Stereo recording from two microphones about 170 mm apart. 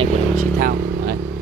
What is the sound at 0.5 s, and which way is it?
Speech, 60° right (ahead or behind).